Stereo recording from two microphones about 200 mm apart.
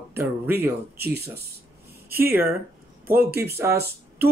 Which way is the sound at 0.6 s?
55° right (ahead or behind).